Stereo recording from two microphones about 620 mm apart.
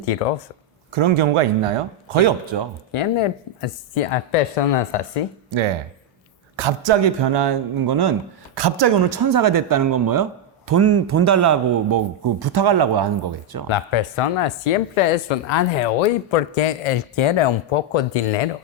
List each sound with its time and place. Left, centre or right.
0.0 s speech: left
0.9 s speech: right
3.2 s speech: left
5.5 s a man's voice: right
13.7 s speech: left
14.7 s speech: left